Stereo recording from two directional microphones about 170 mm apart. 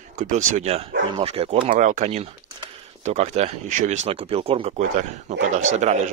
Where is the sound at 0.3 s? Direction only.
45° right (ahead or behind).